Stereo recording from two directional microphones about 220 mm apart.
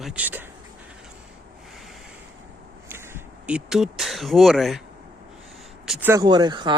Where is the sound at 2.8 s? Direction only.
10° right (ahead or behind).